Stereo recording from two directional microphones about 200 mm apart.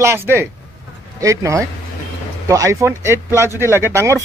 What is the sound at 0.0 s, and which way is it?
A man's voice, 10° right (ahead or behind).